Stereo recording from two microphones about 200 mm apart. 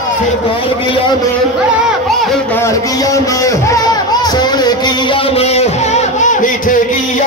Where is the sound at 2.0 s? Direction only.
Centre (ahead or behind).